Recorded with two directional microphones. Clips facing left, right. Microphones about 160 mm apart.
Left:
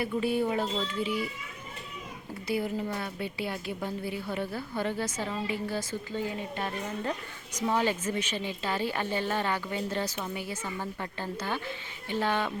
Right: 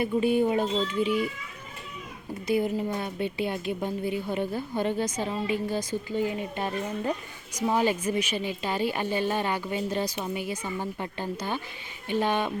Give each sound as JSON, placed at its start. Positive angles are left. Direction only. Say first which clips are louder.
{"t": 0.0, "sound": "a child's voice", "louder": "right 5 dB", "side_deg": -20}
{"t": 2.5, "sound": "a woman's voice", "louder": "right 5 dB", "side_deg": -20}